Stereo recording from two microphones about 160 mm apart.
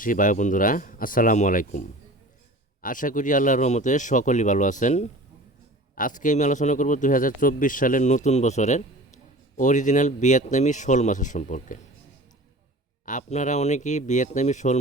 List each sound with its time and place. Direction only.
0.0 s speech: 55° left (ahead or behind)
13.1 s speech: 50° left (ahead or behind)